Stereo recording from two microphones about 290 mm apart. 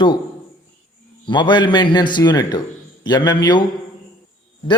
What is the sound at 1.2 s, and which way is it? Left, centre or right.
Speech, centre.